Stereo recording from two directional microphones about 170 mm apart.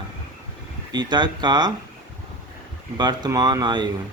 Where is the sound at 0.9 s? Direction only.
25° right (ahead or behind).